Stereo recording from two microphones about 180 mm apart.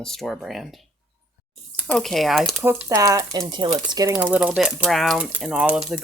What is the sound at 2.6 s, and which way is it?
Speech, 15° right (ahead or behind).